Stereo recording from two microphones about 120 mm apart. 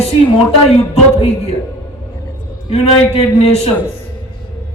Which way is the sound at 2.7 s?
60° left (ahead or behind).